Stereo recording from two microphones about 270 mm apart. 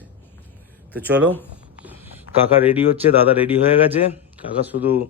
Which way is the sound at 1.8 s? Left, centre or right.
Centre.